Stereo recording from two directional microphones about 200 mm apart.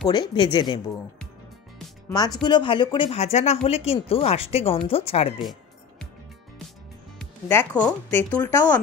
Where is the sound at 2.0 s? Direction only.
20° left (ahead or behind).